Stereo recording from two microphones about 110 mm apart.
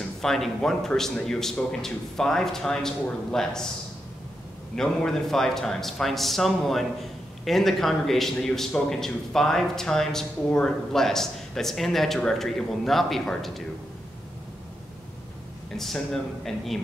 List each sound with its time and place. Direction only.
0.2 s a man's voice: 5° left (ahead or behind)
4.7 s a man's voice: 5° left (ahead or behind)
15.7 s a man's voice: 5° left (ahead or behind)